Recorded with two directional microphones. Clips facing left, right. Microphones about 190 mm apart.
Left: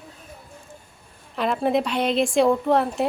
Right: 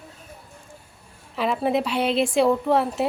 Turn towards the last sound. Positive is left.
turn(degrees=-5)  # may be behind; listen again after turning